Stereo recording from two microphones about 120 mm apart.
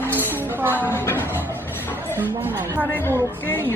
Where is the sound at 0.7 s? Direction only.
20° left (ahead or behind).